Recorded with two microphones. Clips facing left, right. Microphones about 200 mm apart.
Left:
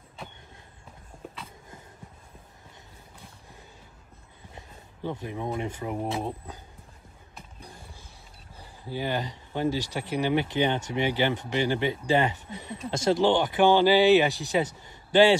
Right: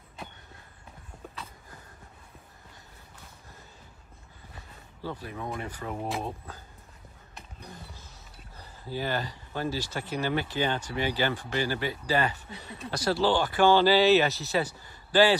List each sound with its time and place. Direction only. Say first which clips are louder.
4.6 s speech: left 3 dB; 20° left (ahead or behind)
8.5 s speech: left 1 dB; 15° left (ahead or behind)